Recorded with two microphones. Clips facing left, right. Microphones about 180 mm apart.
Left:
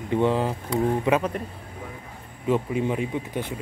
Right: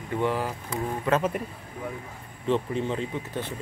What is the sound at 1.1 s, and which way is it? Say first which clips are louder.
Speech: left 1 dB; 20° left (ahead or behind).